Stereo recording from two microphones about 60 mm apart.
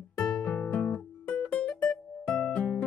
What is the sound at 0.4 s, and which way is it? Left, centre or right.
Music, left.